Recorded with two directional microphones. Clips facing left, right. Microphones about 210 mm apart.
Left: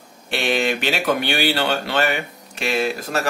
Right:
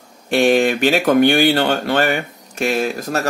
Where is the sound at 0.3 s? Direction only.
45° right (ahead or behind).